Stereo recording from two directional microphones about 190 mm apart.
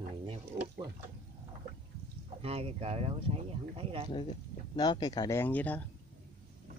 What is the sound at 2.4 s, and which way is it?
Speech, 30° right (ahead or behind).